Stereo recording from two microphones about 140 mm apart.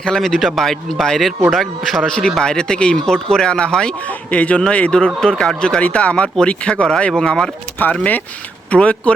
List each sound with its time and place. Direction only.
0.0 s speech: 5° left (ahead or behind)